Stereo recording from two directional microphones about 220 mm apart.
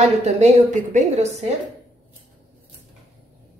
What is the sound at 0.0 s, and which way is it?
A woman's voice, 30° right (ahead or behind).